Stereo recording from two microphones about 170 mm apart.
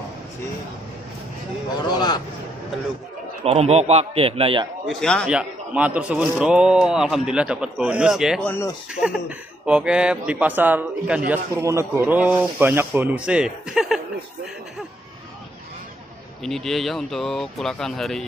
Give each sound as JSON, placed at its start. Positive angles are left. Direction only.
{"t": 1.9, "sound": "a sound", "side_deg": 25}
{"t": 3.4, "sound": "a man's voice", "side_deg": -40}
{"t": 4.8, "sound": "a man's voice", "side_deg": 5}
{"t": 8.5, "sound": "speech", "side_deg": 15}
{"t": 9.0, "sound": "speech", "side_deg": -5}
{"t": 11.5, "sound": "speech", "side_deg": -15}
{"t": 16.4, "sound": "a man's voice", "side_deg": 0}